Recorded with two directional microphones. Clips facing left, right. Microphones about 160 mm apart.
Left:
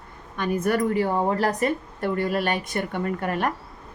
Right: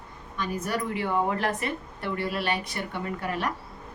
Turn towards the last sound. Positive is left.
turn(degrees=50)  # may be behind; listen again after turning